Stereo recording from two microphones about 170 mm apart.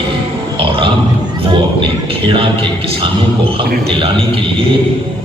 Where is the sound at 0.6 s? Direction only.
30° right (ahead or behind).